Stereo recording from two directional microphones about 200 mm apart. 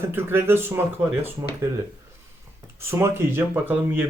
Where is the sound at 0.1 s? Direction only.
10° right (ahead or behind).